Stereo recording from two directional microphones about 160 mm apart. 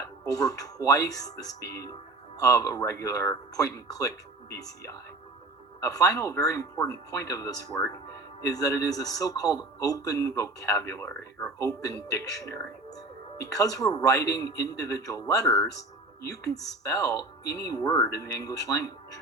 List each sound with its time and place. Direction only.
0.3 s a man's voice: 20° left (ahead or behind)